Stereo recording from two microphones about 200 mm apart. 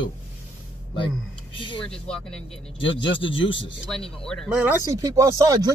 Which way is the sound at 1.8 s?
5° left (ahead or behind).